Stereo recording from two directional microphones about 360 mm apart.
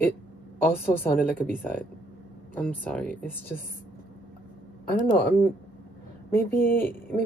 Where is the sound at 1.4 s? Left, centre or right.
Centre.